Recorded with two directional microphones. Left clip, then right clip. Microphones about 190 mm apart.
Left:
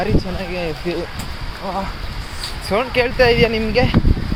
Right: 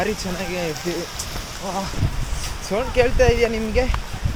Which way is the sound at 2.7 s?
30° left (ahead or behind).